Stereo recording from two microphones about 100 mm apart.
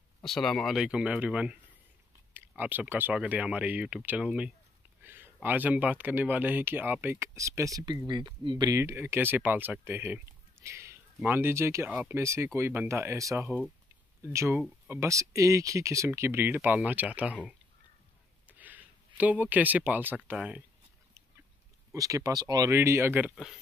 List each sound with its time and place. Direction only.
0.2 s speech: 5° left (ahead or behind)
5.0 s speech: 20° right (ahead or behind)
7.3 s speech: 30° right (ahead or behind)
8.7 s speech: 25° right (ahead or behind)
18.5 s speech: 15° right (ahead or behind)
21.9 s speech: 35° right (ahead or behind)
22.7 s speech: 25° right (ahead or behind)
23.3 s speech: centre (ahead or behind)